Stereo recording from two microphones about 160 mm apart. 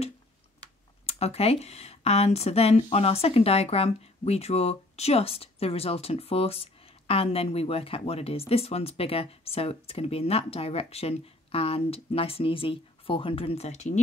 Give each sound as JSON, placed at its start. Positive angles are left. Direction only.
{"t": 1.0, "sound": "speech", "side_deg": 40}